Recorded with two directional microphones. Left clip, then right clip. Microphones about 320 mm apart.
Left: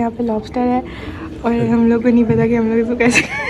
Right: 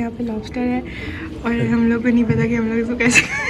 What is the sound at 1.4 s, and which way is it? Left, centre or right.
A woman's voice, centre.